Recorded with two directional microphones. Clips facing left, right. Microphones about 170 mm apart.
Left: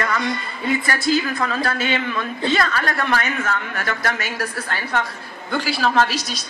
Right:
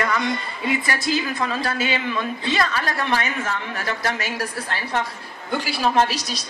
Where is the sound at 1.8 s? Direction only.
35° right (ahead or behind).